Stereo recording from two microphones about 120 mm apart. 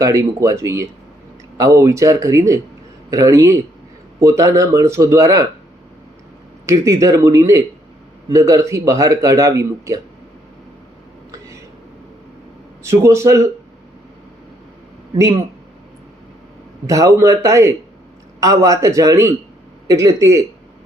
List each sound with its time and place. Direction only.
0.0 s a man's voice: 25° right (ahead or behind)
6.7 s a man's voice: 25° right (ahead or behind)
12.8 s a man's voice: 25° right (ahead or behind)
16.8 s a man's voice: 25° right (ahead or behind)